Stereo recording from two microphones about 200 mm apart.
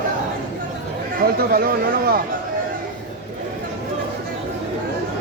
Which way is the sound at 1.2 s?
50° right (ahead or behind).